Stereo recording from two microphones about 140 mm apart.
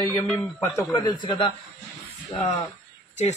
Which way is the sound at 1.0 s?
35° left (ahead or behind).